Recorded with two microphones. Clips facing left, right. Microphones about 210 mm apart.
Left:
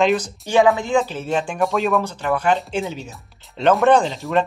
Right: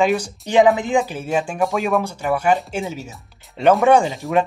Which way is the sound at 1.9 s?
10° right (ahead or behind).